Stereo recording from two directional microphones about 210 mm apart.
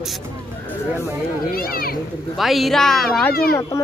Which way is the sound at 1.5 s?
45° left (ahead or behind).